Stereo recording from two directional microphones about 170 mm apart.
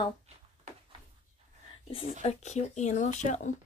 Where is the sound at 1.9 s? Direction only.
35° left (ahead or behind).